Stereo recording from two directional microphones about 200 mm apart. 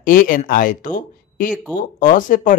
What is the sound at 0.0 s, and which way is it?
Speech, 45° left (ahead or behind).